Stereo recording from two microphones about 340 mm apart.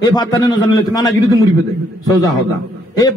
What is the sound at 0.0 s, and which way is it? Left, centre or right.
A man's voice, centre.